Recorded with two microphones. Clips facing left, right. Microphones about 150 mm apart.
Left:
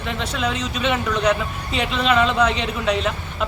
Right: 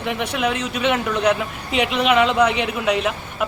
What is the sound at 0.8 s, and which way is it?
Speech, 10° right (ahead or behind).